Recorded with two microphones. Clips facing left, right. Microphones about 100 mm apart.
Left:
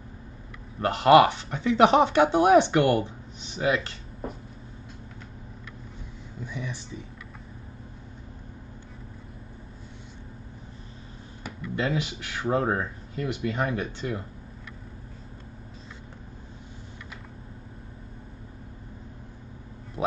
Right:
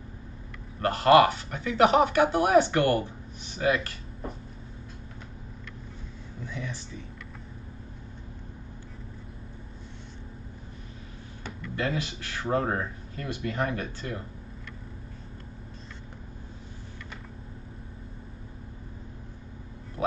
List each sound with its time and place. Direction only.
0.7 s speech: 20° left (ahead or behind)
6.4 s a sound: 15° left (ahead or behind)
11.6 s speech: 20° left (ahead or behind)
20.0 s vehicle: 20° left (ahead or behind)